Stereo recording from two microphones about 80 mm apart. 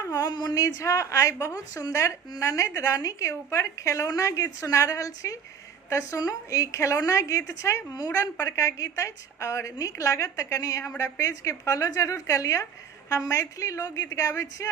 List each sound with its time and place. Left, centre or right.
0.0 s a woman's voice: left